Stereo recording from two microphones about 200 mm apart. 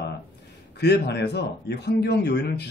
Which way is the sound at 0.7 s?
55° left (ahead or behind).